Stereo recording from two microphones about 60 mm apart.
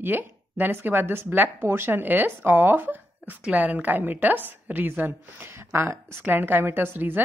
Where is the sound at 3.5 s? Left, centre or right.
Right.